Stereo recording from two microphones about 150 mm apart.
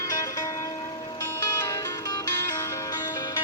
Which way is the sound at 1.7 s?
25° left (ahead or behind).